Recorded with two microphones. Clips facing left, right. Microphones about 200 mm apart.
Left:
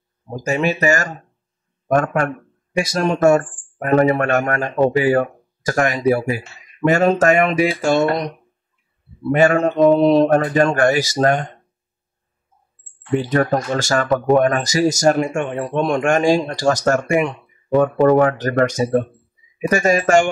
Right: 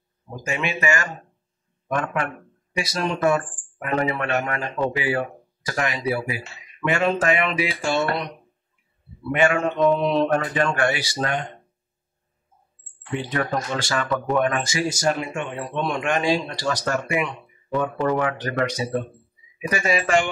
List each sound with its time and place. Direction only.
0.3 s speech: 40° left (ahead or behind)
9.3 s speech: 40° left (ahead or behind)
13.1 s speech: 40° left (ahead or behind)